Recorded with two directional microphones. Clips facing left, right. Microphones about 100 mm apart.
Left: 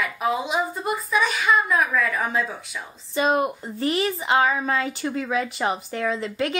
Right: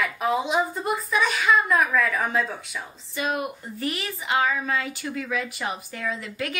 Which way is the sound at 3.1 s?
30° left (ahead or behind).